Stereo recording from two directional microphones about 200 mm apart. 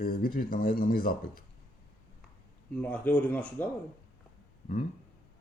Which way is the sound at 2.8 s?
10° left (ahead or behind).